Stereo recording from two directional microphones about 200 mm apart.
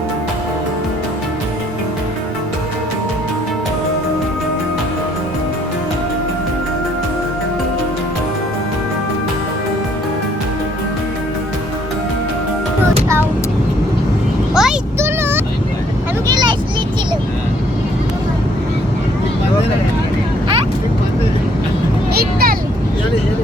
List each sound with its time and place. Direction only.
14.5 s a sound: 5° right (ahead or behind)
16.2 s vehicle: 20° right (ahead or behind)
22.1 s vehicle: 50° right (ahead or behind)